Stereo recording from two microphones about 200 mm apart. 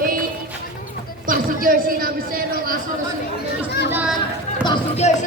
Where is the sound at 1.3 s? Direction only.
45° right (ahead or behind).